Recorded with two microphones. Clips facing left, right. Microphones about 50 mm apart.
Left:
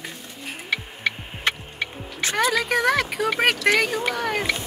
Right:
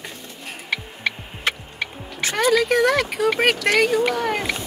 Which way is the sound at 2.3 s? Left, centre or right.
Centre.